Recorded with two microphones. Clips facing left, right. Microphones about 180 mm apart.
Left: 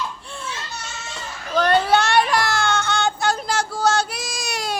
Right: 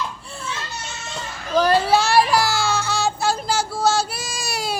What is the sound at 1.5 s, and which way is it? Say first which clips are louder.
Child singing: right 1 dB; 5° right (ahead or behind).